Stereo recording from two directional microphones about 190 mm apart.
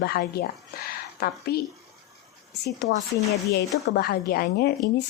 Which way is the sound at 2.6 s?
60° left (ahead or behind).